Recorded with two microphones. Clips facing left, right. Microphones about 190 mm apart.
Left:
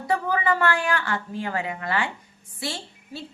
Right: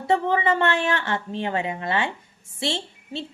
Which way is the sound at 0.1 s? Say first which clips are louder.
Right 3 dB; 25° right (ahead or behind).